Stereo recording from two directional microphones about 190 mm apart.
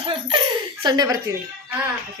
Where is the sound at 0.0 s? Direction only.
25° right (ahead or behind).